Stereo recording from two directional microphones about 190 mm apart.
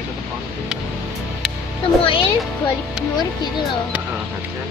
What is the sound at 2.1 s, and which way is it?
Music, 25° left (ahead or behind).